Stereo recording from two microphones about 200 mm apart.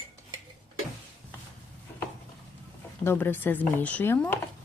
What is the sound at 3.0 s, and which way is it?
Speech, 10° left (ahead or behind).